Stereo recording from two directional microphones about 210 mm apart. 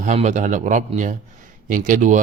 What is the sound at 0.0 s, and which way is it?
Speech, 35° right (ahead or behind).